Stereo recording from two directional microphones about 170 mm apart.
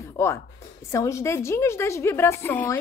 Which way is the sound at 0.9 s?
15° left (ahead or behind).